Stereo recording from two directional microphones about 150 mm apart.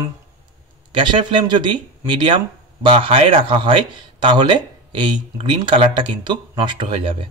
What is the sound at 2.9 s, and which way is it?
Speech, 35° right (ahead or behind).